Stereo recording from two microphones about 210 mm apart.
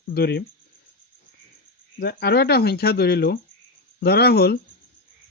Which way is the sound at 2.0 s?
50° left (ahead or behind).